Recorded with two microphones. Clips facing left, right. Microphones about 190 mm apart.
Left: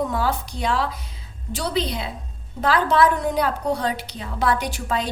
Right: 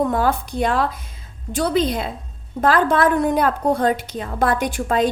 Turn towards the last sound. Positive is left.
turn(degrees=-50)  # may be behind; listen again after turning